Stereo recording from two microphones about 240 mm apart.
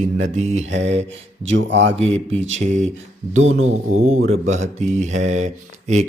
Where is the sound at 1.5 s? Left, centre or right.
Right.